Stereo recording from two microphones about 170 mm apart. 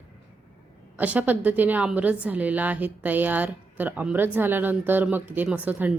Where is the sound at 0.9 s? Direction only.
10° right (ahead or behind).